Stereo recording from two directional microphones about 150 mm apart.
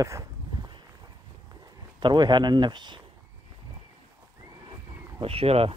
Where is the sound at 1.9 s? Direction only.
30° right (ahead or behind).